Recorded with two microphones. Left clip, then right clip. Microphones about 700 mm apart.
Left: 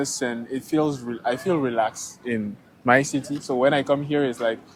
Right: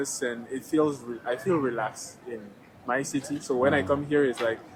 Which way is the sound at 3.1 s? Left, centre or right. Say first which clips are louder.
Left 3 dB; left.